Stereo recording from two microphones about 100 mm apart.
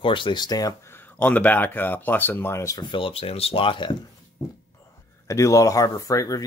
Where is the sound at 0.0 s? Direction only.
55° left (ahead or behind); by 0.7 s 40° left (ahead or behind).